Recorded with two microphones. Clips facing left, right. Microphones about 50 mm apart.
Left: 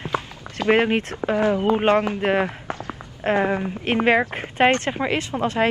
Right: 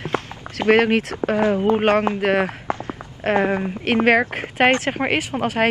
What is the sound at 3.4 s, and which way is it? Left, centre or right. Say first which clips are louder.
Speech: right 2 dB; centre.